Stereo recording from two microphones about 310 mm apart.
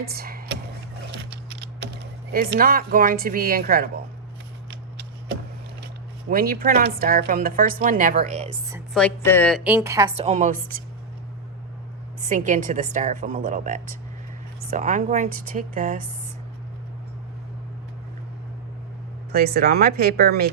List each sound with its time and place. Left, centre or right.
0.0 s speech: right
1.1 s typing: right
6.3 s a woman's voice: right
8.7 s a woman's voice: centre; by 10.6 s right
12.2 s a woman's voice: right
19.3 s a woman's voice: right